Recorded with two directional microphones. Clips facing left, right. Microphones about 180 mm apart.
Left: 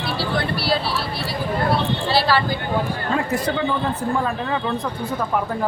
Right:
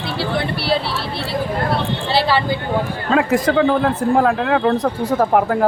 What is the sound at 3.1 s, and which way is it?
Speech, 90° right.